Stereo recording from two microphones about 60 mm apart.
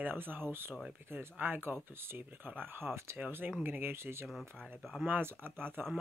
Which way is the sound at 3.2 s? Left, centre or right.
Right.